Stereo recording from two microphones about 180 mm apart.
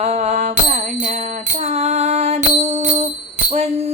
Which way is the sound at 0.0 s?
40° right (ahead or behind).